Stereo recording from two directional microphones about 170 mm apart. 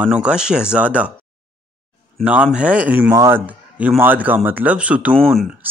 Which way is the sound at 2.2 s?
10° right (ahead or behind).